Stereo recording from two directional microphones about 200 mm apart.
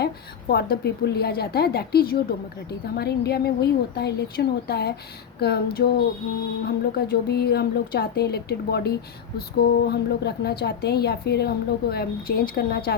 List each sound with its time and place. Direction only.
0.5 s a woman's voice: 55° left (ahead or behind)